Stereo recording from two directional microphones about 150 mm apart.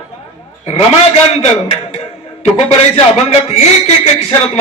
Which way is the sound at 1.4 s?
45° left (ahead or behind).